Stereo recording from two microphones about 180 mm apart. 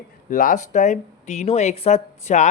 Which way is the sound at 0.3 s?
50° left (ahead or behind).